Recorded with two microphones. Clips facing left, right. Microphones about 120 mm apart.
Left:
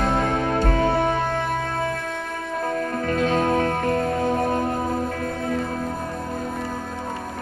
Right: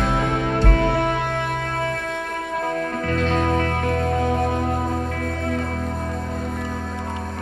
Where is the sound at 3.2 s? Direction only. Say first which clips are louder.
Left 1 dB; 45° left (ahead or behind).